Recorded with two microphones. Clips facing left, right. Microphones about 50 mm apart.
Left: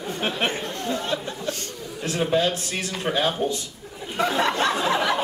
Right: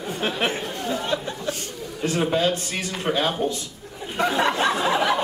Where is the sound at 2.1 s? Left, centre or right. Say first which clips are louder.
Even; centre.